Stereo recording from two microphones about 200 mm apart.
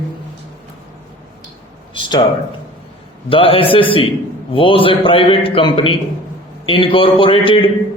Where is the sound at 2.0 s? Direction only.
20° left (ahead or behind).